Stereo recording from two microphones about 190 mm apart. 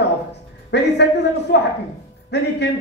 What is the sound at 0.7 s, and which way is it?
Speech, 65° left (ahead or behind).